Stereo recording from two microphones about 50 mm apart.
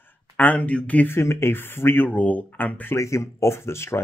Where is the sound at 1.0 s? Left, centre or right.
Left.